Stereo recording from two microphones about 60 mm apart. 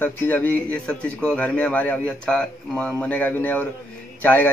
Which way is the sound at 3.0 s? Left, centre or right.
Left.